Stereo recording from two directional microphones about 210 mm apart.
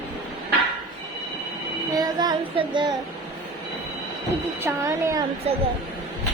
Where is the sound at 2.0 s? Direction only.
20° right (ahead or behind).